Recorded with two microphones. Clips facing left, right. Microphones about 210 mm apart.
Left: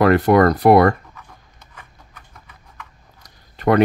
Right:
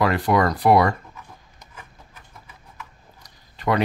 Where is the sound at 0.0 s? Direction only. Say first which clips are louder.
Left 7 dB; 55° left (ahead or behind).